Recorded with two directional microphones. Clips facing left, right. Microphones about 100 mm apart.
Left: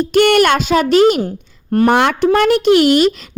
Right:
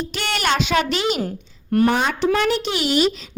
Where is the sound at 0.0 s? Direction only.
55° left (ahead or behind).